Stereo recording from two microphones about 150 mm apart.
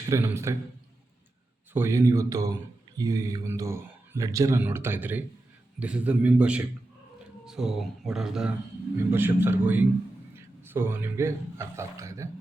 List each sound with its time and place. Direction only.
0.1 s a man's voice: 20° right (ahead or behind)
1.7 s a man's voice: 15° right (ahead or behind)
9.1 s a man's voice: 15° right (ahead or behind)